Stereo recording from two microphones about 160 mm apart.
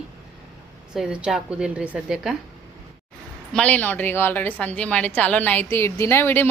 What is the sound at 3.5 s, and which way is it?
A woman's voice, 10° left (ahead or behind).